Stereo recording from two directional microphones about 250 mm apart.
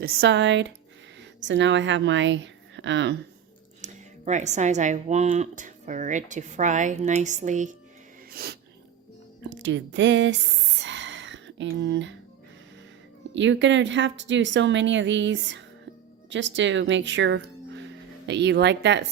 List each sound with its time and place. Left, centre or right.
0.0 s a woman's voice: right
3.8 s music: right
4.3 s speech: right
8.3 s snort: right
9.4 s a woman's voice: right
10.8 s whispering: right
13.3 s a woman's voice: right